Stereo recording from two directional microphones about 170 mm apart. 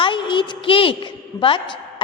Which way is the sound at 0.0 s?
30° left (ahead or behind).